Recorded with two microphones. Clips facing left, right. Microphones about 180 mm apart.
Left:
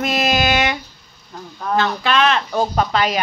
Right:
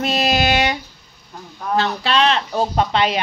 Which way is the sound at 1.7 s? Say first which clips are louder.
Left 1 dB; 30° right (ahead or behind).